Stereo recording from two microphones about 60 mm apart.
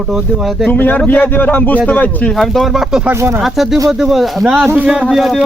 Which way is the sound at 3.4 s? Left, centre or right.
Centre.